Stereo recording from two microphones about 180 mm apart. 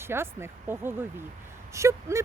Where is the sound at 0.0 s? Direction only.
15° right (ahead or behind).